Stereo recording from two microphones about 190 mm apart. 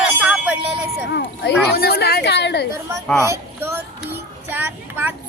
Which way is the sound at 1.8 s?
55° left (ahead or behind).